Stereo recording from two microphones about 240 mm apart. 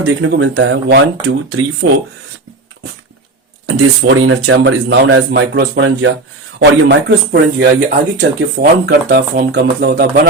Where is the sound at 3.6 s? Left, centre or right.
Right.